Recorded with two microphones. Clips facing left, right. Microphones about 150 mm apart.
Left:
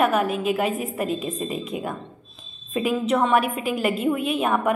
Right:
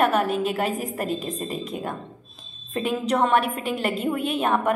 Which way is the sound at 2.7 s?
5° left (ahead or behind).